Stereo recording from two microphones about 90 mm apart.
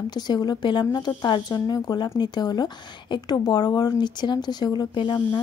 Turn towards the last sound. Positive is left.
turn(degrees=60)  # may be behind; listen again after turning